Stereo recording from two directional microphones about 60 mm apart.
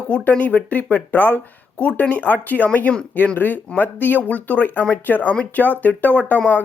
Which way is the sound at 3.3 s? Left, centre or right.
Left.